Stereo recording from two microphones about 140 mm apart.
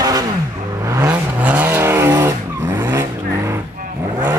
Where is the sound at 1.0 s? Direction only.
10° right (ahead or behind).